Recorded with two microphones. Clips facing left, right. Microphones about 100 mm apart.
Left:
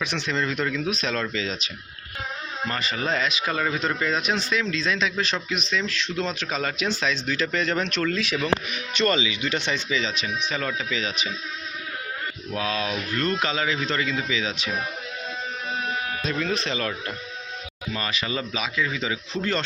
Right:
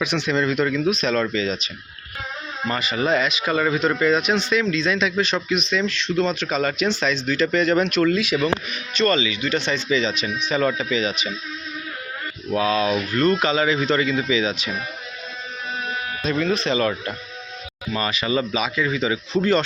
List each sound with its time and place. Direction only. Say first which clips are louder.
0.0 s speech: right 5 dB; 5° right (ahead or behind)
8.7 s speech: right 3 dB; 15° left (ahead or behind)
9.9 s speech: right 5 dB; centre (ahead or behind)
12.5 s speech: right 8 dB; 5° right (ahead or behind)
16.2 s speech: right 7 dB; centre (ahead or behind)